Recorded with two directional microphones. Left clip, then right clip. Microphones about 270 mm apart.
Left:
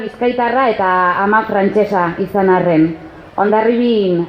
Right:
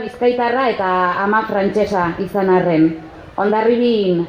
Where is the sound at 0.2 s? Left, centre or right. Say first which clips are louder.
Left 1 dB; left.